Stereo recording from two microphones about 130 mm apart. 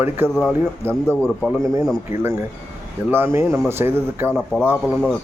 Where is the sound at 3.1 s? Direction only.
20° right (ahead or behind).